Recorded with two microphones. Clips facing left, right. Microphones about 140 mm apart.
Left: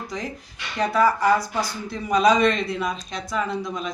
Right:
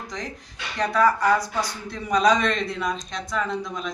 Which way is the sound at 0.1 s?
5° left (ahead or behind).